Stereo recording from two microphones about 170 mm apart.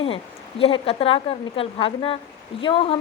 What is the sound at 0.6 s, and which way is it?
Speech, 35° left (ahead or behind).